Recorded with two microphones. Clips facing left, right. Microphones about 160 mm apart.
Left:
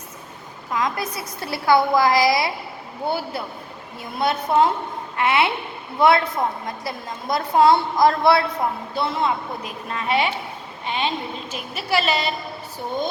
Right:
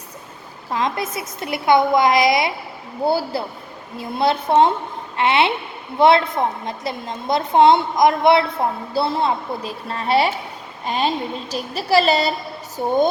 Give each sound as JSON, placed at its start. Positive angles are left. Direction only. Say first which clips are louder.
{"t": 0.7, "sound": "a woman's voice", "louder": "right 2 dB", "side_deg": -25}
{"t": 3.1, "sound": "a woman's voice", "louder": "right 5 dB", "side_deg": -30}
{"t": 8.9, "sound": "a woman's voice", "louder": "right 4 dB", "side_deg": -30}